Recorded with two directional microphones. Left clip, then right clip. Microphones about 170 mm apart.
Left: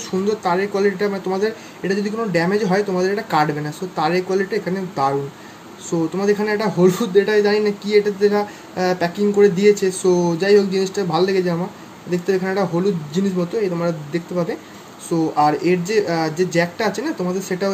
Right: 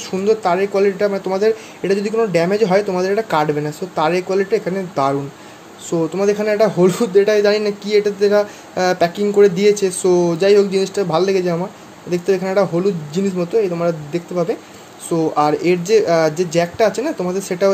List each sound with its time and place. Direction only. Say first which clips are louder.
0.4 s a man's voice: right 3 dB; 25° right (ahead or behind)